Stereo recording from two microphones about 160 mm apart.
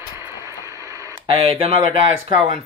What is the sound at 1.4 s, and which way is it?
Speech, 35° right (ahead or behind).